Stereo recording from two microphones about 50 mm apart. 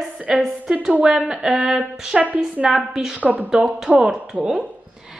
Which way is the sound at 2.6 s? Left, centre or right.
Right.